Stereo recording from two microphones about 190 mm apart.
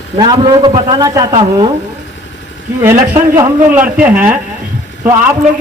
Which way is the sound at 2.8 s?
15° right (ahead or behind).